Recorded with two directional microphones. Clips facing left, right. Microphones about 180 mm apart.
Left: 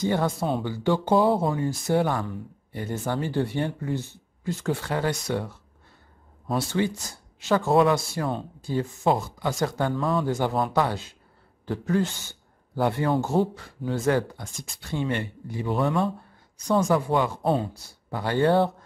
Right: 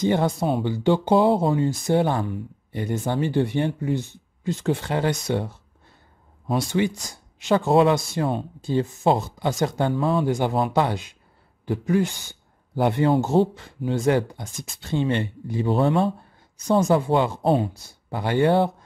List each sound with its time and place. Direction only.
0.0 s speech: 20° right (ahead or behind)